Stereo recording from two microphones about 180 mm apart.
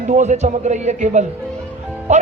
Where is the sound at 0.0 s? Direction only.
40° right (ahead or behind).